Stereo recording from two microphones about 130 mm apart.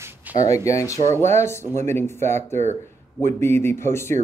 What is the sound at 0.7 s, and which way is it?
Speech, 25° left (ahead or behind).